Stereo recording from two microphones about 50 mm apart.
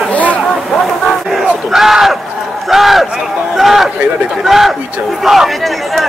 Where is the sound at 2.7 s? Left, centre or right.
Centre.